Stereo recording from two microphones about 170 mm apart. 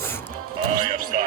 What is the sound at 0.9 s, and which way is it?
Music, 45° right (ahead or behind).